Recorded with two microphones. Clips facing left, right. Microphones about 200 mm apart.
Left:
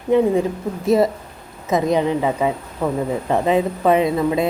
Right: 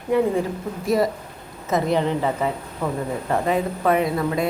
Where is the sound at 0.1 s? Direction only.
20° left (ahead or behind).